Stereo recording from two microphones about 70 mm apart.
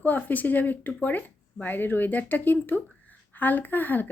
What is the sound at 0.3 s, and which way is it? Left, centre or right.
Speech, left.